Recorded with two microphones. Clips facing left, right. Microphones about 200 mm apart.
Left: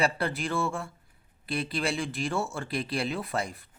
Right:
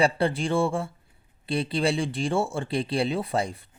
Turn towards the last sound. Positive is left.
turn(degrees=-30)  # may be behind; listen again after turning